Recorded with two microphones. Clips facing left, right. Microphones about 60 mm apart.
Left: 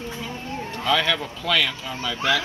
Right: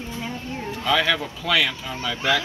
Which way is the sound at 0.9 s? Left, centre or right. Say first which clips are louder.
Right 1 dB; centre.